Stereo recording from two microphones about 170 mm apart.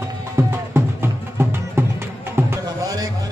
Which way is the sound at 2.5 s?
20° right (ahead or behind).